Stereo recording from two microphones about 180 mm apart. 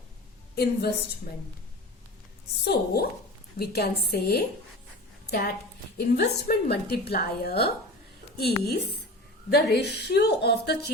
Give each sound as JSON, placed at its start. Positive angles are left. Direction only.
{"t": 0.5, "sound": "a woman's voice", "side_deg": 60}
{"t": 2.6, "sound": "a woman's voice", "side_deg": 60}
{"t": 6.1, "sound": "a woman's voice", "side_deg": 60}